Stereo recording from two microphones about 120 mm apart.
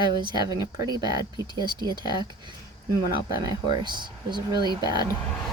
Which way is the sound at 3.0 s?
30° right (ahead or behind).